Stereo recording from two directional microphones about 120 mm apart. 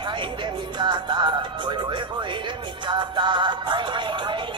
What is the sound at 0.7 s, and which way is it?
Music, 40° right (ahead or behind).